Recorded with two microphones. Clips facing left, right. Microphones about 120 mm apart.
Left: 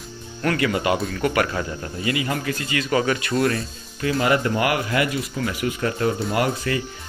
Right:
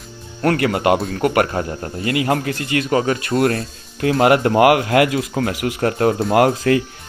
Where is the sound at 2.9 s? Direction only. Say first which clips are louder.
Right 2 dB; 35° right (ahead or behind).